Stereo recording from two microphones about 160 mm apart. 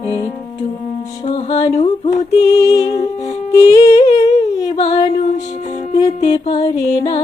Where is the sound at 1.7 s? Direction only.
45° left (ahead or behind).